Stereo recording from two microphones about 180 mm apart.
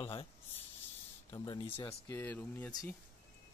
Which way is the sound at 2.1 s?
10° left (ahead or behind).